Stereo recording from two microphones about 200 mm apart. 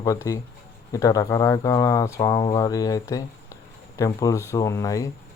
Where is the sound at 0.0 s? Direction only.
15° left (ahead or behind).